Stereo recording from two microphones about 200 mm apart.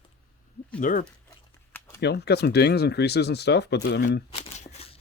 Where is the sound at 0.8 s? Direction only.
45° left (ahead or behind).